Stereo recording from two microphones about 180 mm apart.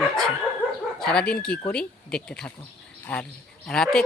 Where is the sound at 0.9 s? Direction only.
5° left (ahead or behind).